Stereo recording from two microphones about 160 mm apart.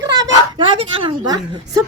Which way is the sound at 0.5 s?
35° right (ahead or behind).